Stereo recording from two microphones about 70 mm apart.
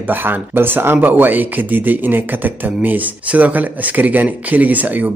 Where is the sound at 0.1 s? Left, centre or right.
Right.